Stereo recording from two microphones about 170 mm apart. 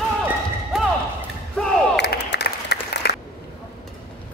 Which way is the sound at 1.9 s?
80° left.